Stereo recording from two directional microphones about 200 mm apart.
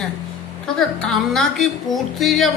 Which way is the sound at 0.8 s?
5° left (ahead or behind).